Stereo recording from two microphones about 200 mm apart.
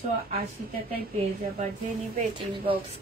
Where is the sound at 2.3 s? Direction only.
25° right (ahead or behind).